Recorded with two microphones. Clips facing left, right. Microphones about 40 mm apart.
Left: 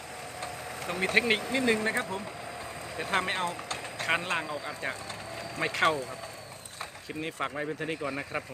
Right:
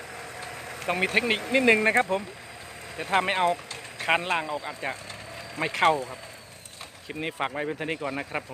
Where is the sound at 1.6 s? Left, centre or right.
Right.